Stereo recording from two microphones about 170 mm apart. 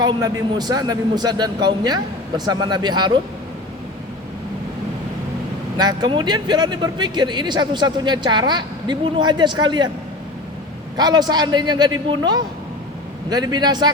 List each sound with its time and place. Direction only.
0.0 s speech: 25° right (ahead or behind)
5.7 s speech: 25° right (ahead or behind)
10.9 s speech: 25° right (ahead or behind)